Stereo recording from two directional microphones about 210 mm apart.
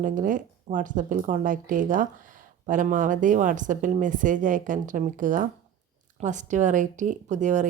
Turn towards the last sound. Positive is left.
turn(degrees=-35)  # may be behind; listen again after turning